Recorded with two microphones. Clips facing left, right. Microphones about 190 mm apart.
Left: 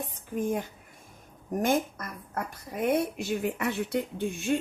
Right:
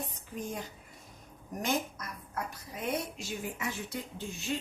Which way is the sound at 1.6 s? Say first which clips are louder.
Left 6 dB; 50° left (ahead or behind).